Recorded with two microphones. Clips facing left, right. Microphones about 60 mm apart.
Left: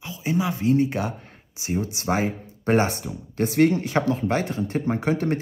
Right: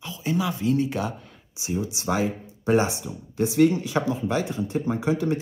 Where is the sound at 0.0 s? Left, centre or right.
Left.